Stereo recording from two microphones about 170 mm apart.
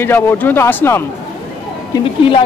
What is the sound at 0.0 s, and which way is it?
Speech, 15° left (ahead or behind).